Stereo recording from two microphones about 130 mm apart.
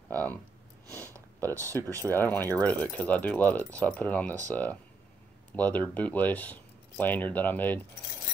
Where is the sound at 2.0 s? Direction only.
15° left (ahead or behind).